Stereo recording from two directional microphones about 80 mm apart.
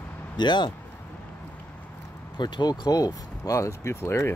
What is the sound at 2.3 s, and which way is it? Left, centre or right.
Speech, left.